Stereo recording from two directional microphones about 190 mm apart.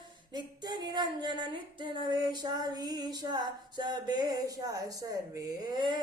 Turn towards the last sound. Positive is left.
turn(degrees=-25)  # may be behind; listen again after turning